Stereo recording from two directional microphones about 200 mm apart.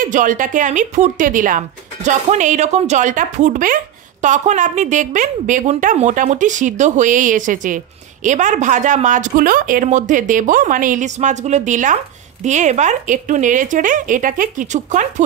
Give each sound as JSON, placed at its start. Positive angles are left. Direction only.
{"t": 0.0, "sound": "a woman's voice", "side_deg": -40}